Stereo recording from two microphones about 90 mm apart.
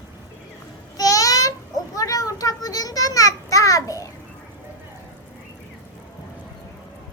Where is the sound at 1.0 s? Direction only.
40° left (ahead or behind).